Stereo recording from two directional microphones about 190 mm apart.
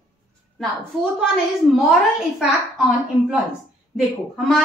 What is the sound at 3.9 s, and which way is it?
Speech, 5° left (ahead or behind).